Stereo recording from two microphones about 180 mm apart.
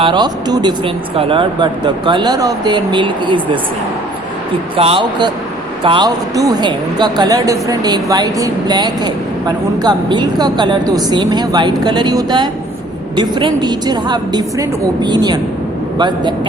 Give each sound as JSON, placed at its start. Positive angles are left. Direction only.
{"t": 0.0, "sound": "speech", "side_deg": -25}
{"t": 4.8, "sound": "speech", "side_deg": -30}